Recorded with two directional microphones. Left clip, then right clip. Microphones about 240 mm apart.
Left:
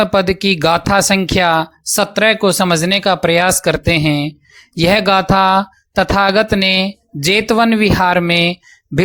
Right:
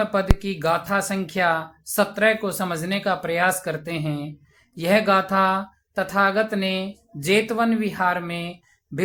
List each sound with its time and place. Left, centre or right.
0.0 s speech: left